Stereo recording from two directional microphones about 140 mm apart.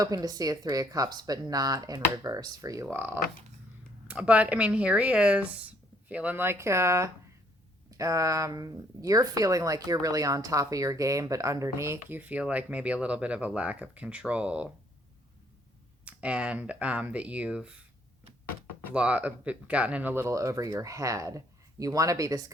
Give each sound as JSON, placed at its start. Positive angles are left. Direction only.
{"t": 0.0, "sound": "speech", "side_deg": -25}
{"t": 16.0, "sound": "speech", "side_deg": -10}
{"t": 18.9, "sound": "speech", "side_deg": -10}